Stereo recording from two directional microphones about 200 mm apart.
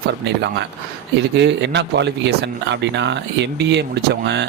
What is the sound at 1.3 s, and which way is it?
Speech, 60° right (ahead or behind).